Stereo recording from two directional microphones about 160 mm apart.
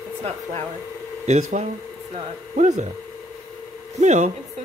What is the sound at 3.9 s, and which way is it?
Speech, 45° right (ahead or behind).